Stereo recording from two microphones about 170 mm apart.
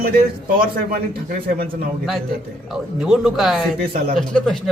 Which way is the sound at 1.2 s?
60° right (ahead or behind).